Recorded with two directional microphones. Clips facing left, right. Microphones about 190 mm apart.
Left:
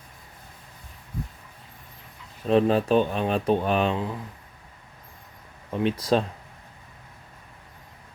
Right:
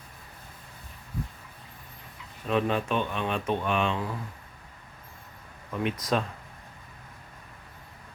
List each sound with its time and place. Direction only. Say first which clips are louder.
2.5 s speech: left 7 dB; 35° left (ahead or behind)
5.7 s speech: left 5 dB; 30° left (ahead or behind)